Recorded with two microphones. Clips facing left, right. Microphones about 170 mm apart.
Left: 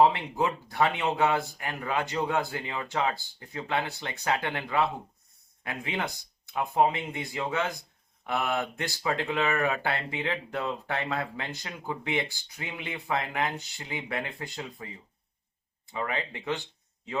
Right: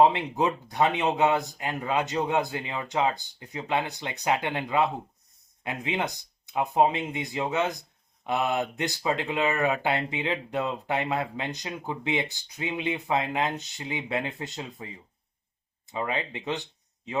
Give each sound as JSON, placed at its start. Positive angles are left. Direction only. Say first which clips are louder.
{"t": 0.0, "sound": "speech", "louder": "right 2 dB", "side_deg": -20}
{"t": 15.9, "sound": "speech", "louder": "right 2 dB", "side_deg": -20}